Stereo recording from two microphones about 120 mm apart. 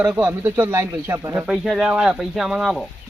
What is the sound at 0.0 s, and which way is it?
Speech, 10° right (ahead or behind).